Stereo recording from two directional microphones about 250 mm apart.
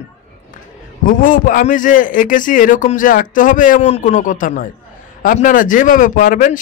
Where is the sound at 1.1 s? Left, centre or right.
Left.